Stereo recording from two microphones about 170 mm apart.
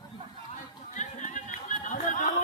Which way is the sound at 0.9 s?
45° left (ahead or behind).